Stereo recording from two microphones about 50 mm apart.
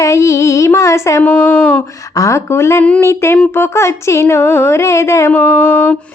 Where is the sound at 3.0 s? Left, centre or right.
Left.